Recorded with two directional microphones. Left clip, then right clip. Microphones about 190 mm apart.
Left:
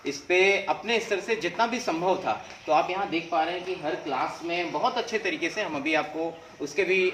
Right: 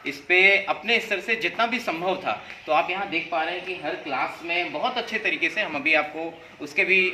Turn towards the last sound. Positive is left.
turn(degrees=-25)  # may be behind; listen again after turning